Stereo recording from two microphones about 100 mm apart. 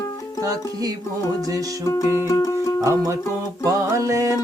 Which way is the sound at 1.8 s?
30° left (ahead or behind).